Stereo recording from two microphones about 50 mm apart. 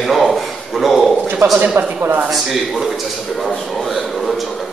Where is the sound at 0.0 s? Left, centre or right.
Centre.